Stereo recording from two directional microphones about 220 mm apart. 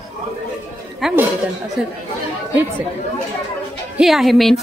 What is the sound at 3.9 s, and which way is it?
Speech, centre (ahead or behind).